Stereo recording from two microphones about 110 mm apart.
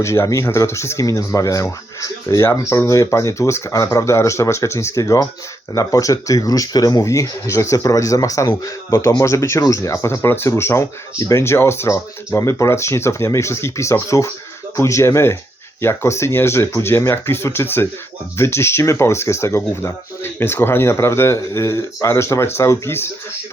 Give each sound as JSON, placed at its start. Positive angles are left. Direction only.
{"t": 0.0, "sound": "speech", "side_deg": 25}